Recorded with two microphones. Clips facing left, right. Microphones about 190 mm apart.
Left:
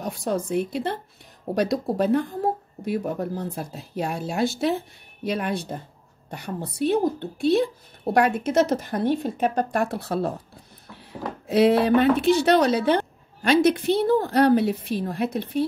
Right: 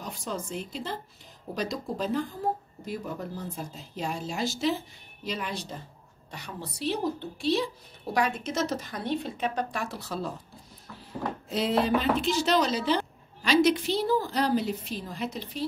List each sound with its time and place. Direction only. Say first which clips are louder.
0.0 s speech: left 9 dB; 65° left (ahead or behind)